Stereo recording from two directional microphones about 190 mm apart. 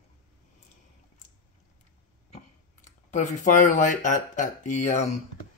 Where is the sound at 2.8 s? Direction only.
40° left (ahead or behind).